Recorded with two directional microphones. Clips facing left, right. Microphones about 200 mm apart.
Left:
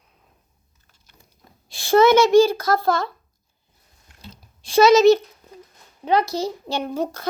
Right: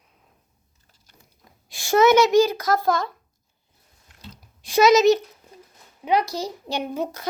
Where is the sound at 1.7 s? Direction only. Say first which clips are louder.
Left 2 dB; 15° right (ahead or behind).